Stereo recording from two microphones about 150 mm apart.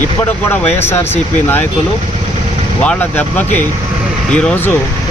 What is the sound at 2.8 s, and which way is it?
Speech, 10° left (ahead or behind).